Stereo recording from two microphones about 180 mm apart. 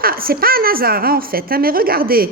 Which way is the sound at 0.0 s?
55° right (ahead or behind).